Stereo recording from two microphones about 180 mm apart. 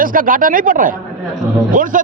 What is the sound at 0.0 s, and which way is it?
A man's voice, 50° right (ahead or behind).